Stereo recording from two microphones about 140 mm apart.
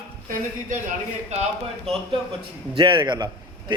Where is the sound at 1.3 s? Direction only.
50° right (ahead or behind).